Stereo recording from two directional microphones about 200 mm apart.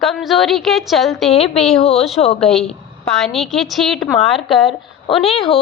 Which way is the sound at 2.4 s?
Centre (ahead or behind).